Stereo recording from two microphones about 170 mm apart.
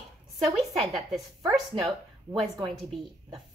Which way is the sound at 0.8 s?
Centre (ahead or behind).